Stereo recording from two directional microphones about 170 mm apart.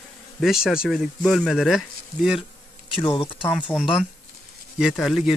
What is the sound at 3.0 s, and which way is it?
Speech, 30° left (ahead or behind).